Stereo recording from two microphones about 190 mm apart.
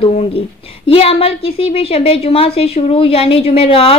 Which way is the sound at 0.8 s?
30° left (ahead or behind).